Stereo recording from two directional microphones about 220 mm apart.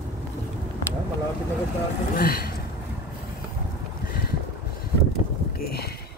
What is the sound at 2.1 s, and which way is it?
Speech, 40° left (ahead or behind).